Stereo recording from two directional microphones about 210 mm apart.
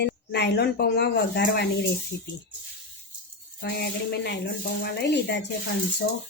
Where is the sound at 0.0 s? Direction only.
55° left (ahead or behind).